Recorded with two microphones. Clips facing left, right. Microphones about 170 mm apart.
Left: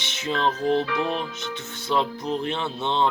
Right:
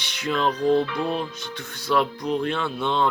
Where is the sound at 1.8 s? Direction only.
20° left (ahead or behind).